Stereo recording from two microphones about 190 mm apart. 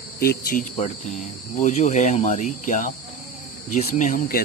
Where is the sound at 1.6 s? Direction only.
40° left (ahead or behind).